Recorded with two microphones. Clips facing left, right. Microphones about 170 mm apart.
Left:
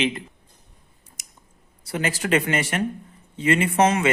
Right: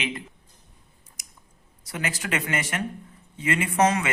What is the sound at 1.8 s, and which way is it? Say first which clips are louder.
Speech: left 6 dB; 30° left (ahead or behind).